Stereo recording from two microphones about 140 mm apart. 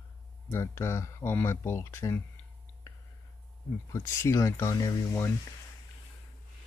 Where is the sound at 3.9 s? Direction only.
20° left (ahead or behind).